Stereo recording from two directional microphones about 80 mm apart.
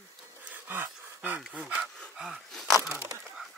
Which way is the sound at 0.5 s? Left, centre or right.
Right.